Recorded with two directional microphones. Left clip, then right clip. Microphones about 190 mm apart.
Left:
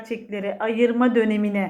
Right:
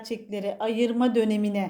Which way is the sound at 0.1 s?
50° right (ahead or behind).